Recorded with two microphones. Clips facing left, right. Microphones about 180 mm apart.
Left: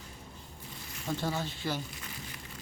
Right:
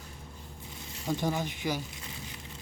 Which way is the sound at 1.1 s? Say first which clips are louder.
Right 3 dB; 15° right (ahead or behind).